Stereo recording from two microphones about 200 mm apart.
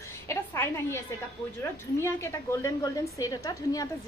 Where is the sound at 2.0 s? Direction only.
15° left (ahead or behind).